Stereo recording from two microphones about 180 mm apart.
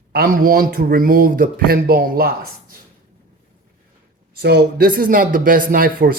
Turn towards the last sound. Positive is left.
turn(degrees=-50)  # may be behind; listen again after turning